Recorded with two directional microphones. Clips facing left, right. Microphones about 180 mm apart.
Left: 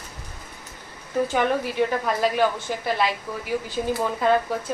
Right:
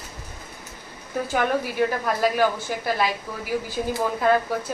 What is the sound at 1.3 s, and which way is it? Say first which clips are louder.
Speech: right 2 dB; centre (ahead or behind).